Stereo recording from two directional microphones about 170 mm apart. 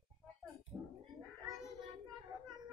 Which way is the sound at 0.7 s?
10° right (ahead or behind).